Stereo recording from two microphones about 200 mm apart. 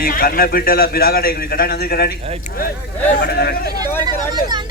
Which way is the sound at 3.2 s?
50° left (ahead or behind).